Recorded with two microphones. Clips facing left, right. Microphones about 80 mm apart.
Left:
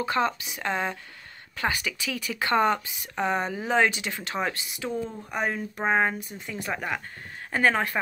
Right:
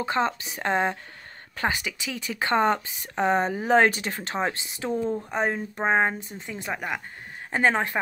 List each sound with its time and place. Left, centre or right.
0.0 s speech: right
1.6 s speech: right
6.7 s speech: centre
7.5 s speech: right